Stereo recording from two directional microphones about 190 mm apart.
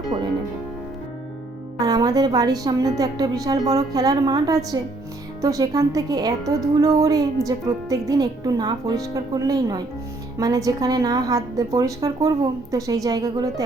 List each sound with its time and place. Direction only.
0.1 s music: 20° right (ahead or behind)
1.8 s a woman's voice: 20° right (ahead or behind)